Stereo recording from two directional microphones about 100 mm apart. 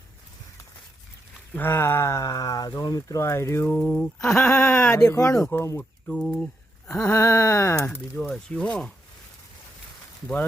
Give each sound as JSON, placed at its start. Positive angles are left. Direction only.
{"t": 1.5, "sound": "speech", "side_deg": 20}
{"t": 3.7, "sound": "speech", "side_deg": 10}
{"t": 4.4, "sound": "speech", "side_deg": 25}
{"t": 5.1, "sound": "speech", "side_deg": 35}
{"t": 6.1, "sound": "speech", "side_deg": 10}
{"t": 6.3, "sound": "a sound", "side_deg": 5}
{"t": 6.9, "sound": "speech", "side_deg": 30}
{"t": 8.3, "sound": "speech", "side_deg": 10}